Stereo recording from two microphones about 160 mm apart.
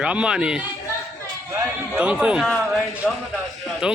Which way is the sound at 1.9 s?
5° right (ahead or behind).